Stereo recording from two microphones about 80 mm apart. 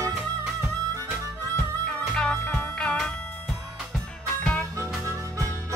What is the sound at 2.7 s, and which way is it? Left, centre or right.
Music, centre.